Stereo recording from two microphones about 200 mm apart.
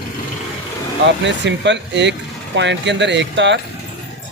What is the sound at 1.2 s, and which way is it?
Speech, 60° right (ahead or behind).